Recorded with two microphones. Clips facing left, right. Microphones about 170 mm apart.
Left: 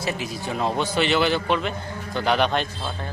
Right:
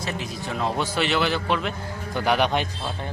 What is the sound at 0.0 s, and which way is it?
A man's voice, 5° left (ahead or behind).